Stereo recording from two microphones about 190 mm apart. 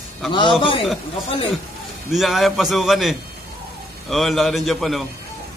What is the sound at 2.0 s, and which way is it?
A man's voice, centre (ahead or behind).